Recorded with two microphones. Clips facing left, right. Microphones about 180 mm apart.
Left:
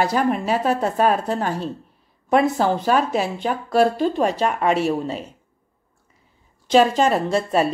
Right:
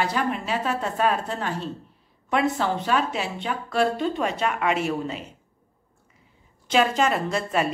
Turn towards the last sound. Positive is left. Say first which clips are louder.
# left 5 dB
turn(degrees=35)  # may be behind; listen again after turning